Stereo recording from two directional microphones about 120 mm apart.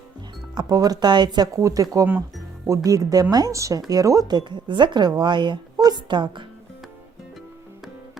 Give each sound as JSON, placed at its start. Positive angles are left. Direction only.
{"t": 0.5, "sound": "speech", "side_deg": -35}